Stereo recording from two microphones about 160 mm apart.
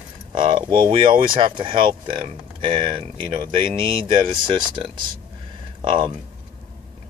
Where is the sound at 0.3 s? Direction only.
30° right (ahead or behind).